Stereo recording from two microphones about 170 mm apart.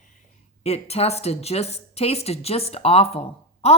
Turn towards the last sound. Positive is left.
turn(degrees=35)  # may be behind; listen again after turning